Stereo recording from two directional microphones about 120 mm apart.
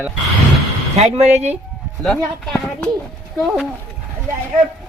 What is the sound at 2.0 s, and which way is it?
Speech, 10° left (ahead or behind).